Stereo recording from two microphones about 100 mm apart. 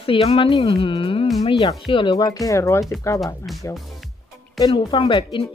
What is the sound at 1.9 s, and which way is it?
Speech, 60° left (ahead or behind).